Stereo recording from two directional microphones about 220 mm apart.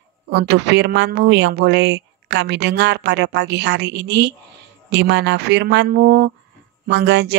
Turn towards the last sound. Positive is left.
turn(degrees=-50)  # may be behind; listen again after turning